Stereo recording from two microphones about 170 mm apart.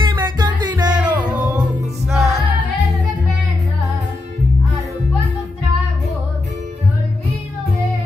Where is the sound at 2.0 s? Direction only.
Centre (ahead or behind).